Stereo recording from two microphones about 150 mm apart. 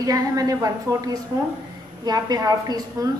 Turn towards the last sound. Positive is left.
turn(degrees=-25)  # may be behind; listen again after turning